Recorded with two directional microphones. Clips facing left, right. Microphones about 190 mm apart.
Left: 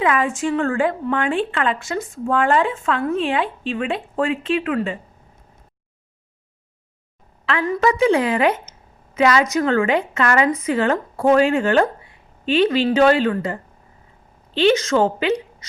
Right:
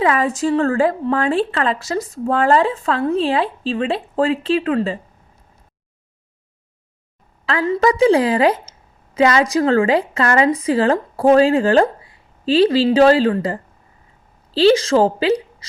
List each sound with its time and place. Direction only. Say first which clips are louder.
0.0 s a woman's voice: right 2 dB; 35° right (ahead or behind)
7.7 s a woman's voice: right 3 dB; 35° right (ahead or behind)